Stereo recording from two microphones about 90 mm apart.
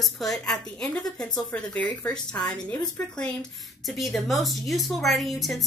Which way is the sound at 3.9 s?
Centre (ahead or behind).